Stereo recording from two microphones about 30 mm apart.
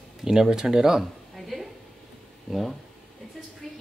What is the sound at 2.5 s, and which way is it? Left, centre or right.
Speech, centre.